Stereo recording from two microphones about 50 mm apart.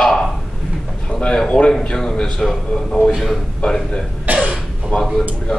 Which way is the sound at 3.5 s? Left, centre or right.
Centre.